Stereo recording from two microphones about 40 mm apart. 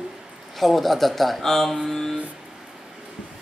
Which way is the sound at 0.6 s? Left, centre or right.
Centre.